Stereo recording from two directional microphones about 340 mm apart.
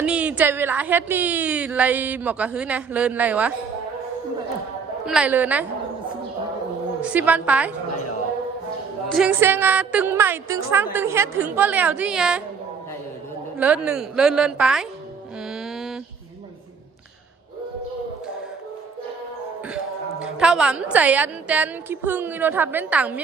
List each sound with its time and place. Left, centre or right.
0.0 s a woman's voice: centre
5.0 s a woman's voice: centre
7.0 s a woman's voice: centre
9.0 s a woman's voice: centre
13.6 s a woman's voice: centre
15.4 s music: centre
19.6 s a woman's voice: centre